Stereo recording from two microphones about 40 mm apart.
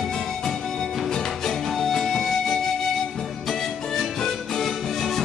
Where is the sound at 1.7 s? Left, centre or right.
Centre.